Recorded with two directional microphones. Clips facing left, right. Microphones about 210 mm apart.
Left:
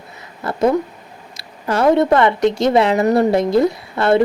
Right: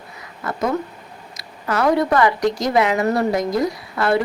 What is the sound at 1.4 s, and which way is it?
Speech, 30° left (ahead or behind).